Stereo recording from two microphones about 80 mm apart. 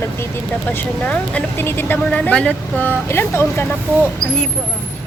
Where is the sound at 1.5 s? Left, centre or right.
Left.